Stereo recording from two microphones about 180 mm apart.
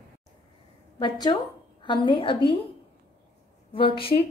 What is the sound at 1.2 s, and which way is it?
A woman's voice, 25° left (ahead or behind).